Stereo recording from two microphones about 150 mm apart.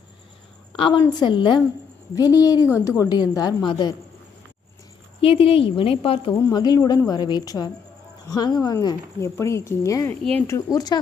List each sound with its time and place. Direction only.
1.2 s speech: 30° left (ahead or behind)
5.2 s speech: 40° left (ahead or behind)
6.3 s speech: 25° left (ahead or behind)